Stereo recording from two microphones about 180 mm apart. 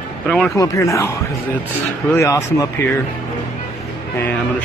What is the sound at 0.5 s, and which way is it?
Speech, 20° left (ahead or behind).